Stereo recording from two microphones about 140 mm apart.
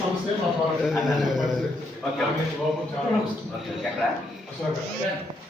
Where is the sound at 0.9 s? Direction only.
Centre (ahead or behind).